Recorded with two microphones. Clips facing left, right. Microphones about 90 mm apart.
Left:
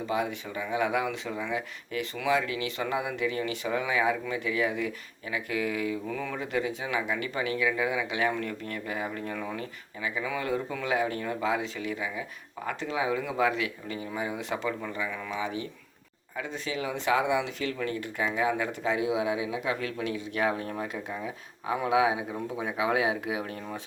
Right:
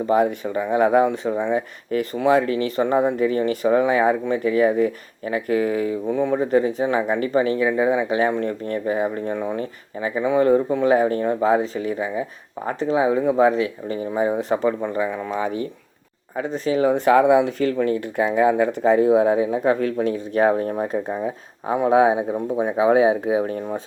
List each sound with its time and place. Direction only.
0.0 s speech: 45° right (ahead or behind)
6.1 s speech: 25° right (ahead or behind)
6.4 s speech: 40° right (ahead or behind)